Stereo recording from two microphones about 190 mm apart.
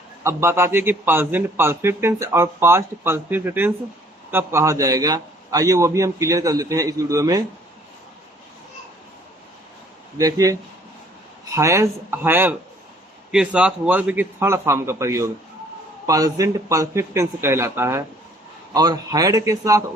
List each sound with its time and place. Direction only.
0.3 s a man's voice: 15° right (ahead or behind)
10.2 s a man's voice: 20° right (ahead or behind)